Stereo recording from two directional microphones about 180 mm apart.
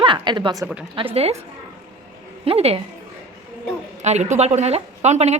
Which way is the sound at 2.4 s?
35° right (ahead or behind).